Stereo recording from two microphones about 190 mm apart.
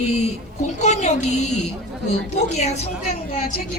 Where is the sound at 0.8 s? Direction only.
35° left (ahead or behind).